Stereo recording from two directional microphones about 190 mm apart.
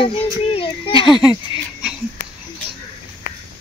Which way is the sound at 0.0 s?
30° left (ahead or behind).